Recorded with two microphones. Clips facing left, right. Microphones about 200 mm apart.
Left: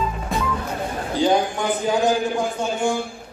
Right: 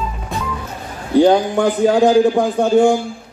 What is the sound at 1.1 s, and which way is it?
A man's voice, 60° right (ahead or behind).